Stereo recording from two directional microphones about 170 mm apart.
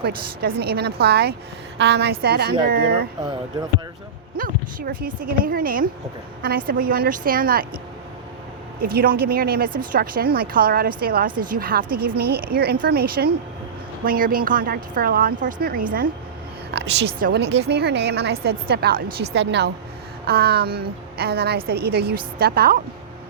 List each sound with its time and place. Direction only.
0.0 s a woman's voice: 65° right (ahead or behind)
1.8 s a woman's voice: 80° right; by 3.1 s 60° right (ahead or behind)
4.4 s a woman's voice: 55° right (ahead or behind)
8.8 s a woman's voice: 60° right (ahead or behind)
16.7 s music: 80° right
17.2 s a woman's voice: 70° right (ahead or behind)
19.2 s a woman's voice: 90° right
20.2 s a woman's voice: 65° right (ahead or behind)